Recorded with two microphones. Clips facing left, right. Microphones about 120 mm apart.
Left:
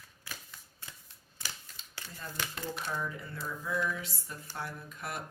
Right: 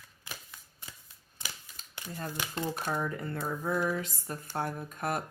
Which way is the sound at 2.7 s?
45° right (ahead or behind).